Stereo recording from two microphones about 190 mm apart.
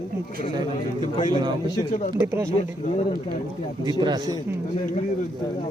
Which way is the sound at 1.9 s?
40° left (ahead or behind).